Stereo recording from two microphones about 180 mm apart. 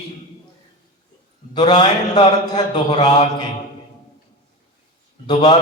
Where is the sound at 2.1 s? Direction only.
20° left (ahead or behind).